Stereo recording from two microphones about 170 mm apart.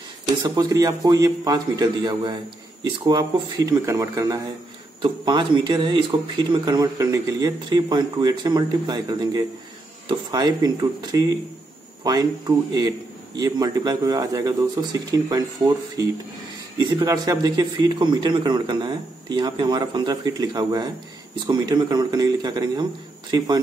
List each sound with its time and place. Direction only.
0.4 s speech: 25° right (ahead or behind)